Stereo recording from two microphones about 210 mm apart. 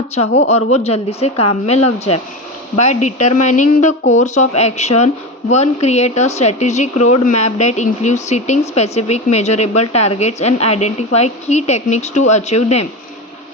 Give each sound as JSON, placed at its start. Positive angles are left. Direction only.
{"t": 0.4, "sound": "a woman's voice", "side_deg": 30}